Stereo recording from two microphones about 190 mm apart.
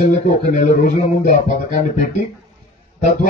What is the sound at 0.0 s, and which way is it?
Speech, 40° left (ahead or behind).